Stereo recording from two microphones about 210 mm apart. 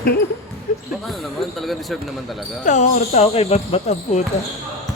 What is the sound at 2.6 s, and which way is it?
Speech, 35° left (ahead or behind).